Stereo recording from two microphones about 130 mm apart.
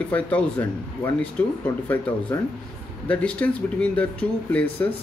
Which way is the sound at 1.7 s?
25° left (ahead or behind).